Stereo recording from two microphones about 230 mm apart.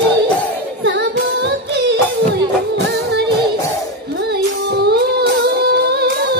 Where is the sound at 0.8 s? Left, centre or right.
Right.